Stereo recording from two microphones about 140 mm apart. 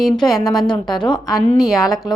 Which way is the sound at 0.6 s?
30° left (ahead or behind).